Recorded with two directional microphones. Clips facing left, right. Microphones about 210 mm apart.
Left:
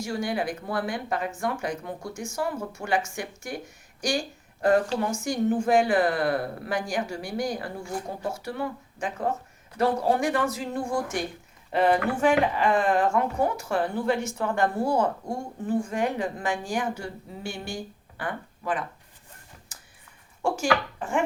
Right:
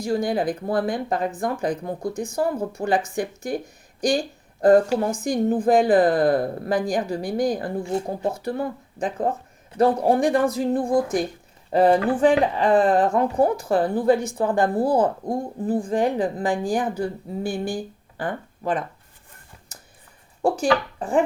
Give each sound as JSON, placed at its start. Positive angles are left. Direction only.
{"t": 0.0, "sound": "a woman's voice", "side_deg": -35}
{"t": 20.4, "sound": "speech", "side_deg": -35}